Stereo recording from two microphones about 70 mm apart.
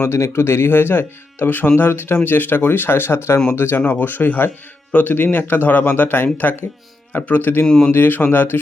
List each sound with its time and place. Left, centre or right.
0.0 s speech: left
7.6 s speech: centre
7.9 s speech: left